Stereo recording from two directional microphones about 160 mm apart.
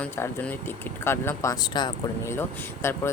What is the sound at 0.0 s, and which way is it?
Speech, 10° left (ahead or behind).